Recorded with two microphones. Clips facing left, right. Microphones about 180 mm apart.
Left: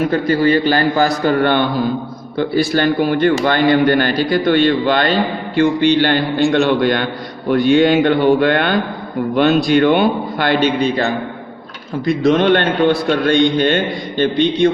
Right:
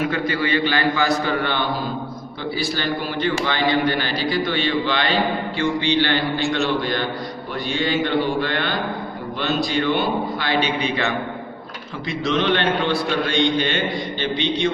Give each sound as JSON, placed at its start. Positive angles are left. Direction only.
{"t": 0.0, "sound": "a man's voice", "side_deg": 40}